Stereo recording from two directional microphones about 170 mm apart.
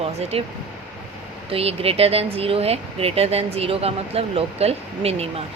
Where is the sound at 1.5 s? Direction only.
35° right (ahead or behind).